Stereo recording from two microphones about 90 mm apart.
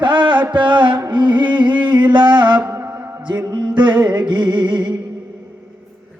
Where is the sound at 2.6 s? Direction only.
20° right (ahead or behind).